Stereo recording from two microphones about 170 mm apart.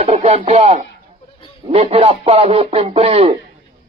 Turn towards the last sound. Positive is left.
turn(degrees=-35)  # may be behind; listen again after turning